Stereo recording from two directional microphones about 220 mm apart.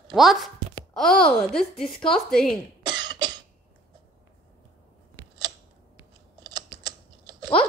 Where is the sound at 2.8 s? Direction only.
20° right (ahead or behind).